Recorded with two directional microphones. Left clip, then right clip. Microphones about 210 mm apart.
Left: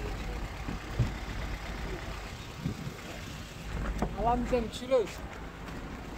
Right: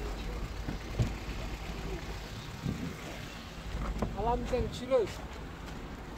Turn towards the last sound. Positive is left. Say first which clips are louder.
# left 1 dB
turn(degrees=50)  # may be behind; listen again after turning